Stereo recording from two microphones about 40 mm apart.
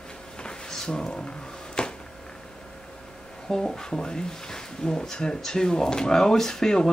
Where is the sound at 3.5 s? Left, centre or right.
Centre.